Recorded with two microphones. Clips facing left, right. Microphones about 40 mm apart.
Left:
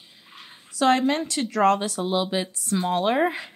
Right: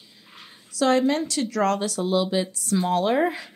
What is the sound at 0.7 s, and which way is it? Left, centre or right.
Speech, left.